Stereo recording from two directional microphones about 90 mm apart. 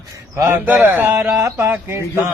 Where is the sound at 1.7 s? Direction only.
25° right (ahead or behind).